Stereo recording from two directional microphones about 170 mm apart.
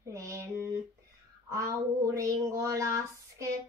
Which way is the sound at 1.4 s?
20° right (ahead or behind).